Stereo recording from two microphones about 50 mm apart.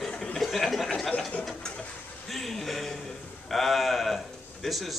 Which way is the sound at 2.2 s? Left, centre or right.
Centre.